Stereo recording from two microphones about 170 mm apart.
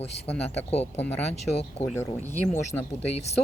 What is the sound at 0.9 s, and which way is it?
Speech, 10° left (ahead or behind).